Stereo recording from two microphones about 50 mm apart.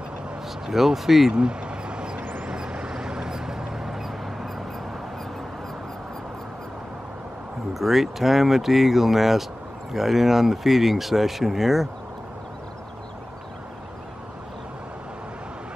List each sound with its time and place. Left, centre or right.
0.7 s speech: centre
1.3 s a sound: centre
2.4 s vehicle: centre
7.7 s speech: centre